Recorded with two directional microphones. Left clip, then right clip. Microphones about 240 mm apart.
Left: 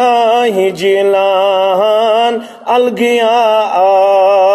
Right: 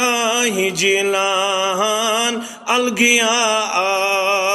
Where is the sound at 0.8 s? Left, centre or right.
Right.